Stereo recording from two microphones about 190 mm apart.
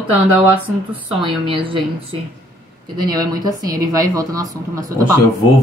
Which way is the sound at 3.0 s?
20° right (ahead or behind).